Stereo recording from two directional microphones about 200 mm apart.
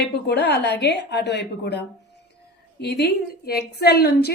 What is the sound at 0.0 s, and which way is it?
A woman's voice, 55° left (ahead or behind).